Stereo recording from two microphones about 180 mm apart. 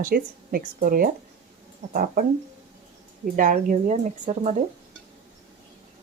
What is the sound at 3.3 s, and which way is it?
Speech, 45° right (ahead or behind).